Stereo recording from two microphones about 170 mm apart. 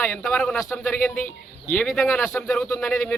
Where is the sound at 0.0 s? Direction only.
5° left (ahead or behind).